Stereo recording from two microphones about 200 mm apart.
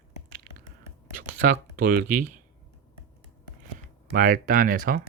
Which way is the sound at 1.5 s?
45° right (ahead or behind).